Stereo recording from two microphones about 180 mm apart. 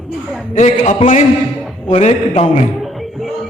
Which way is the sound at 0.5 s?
40° left (ahead or behind).